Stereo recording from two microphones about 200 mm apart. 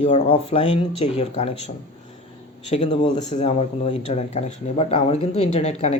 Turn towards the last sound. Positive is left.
turn(degrees=30)  # may be behind; listen again after turning